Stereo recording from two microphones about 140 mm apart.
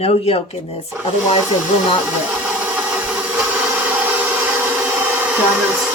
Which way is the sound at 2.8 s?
10° right (ahead or behind).